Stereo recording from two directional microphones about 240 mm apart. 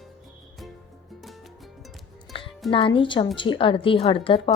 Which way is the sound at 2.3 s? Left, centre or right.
Left.